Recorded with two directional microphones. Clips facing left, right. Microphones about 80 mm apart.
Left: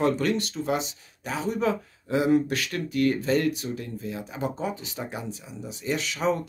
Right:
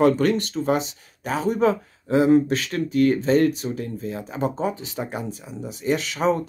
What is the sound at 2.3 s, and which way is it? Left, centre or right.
Speech, right.